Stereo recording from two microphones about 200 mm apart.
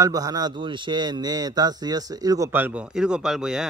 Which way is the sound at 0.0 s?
20° right (ahead or behind).